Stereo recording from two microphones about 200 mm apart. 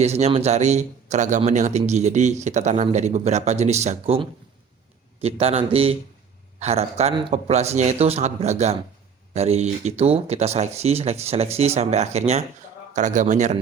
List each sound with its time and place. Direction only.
0.0 s speech: 35° right (ahead or behind)